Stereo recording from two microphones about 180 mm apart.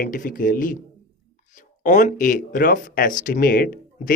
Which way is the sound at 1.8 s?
45° left (ahead or behind).